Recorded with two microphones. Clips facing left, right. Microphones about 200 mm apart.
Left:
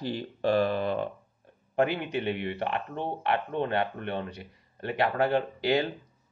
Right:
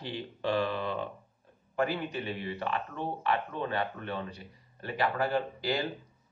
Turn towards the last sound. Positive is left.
turn(degrees=60)  # may be behind; listen again after turning